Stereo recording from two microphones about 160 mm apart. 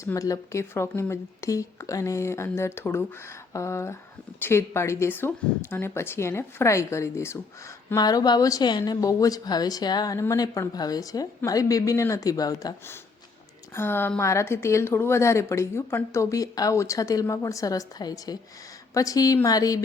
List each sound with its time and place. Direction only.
0.0 s a woman's voice: 20° left (ahead or behind)